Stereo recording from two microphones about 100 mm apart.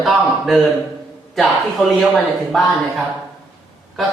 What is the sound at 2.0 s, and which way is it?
A man's voice, centre (ahead or behind).